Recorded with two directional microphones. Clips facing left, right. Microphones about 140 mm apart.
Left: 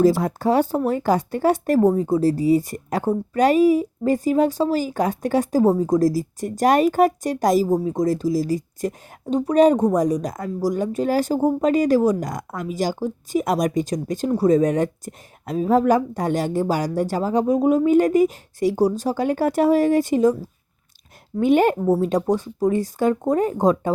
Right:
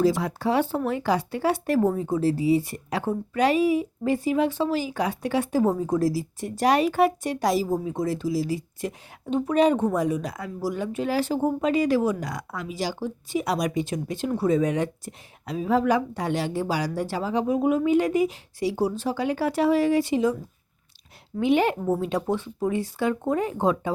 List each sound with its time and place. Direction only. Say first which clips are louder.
0.0 s speech: left 5 dB; 45° left (ahead or behind)
21.3 s speech: left 5 dB; 45° left (ahead or behind)